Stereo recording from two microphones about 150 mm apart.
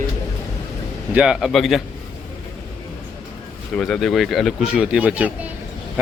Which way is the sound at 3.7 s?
5° left (ahead or behind).